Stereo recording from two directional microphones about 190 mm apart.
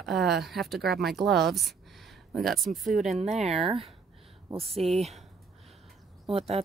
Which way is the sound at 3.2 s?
35° right (ahead or behind).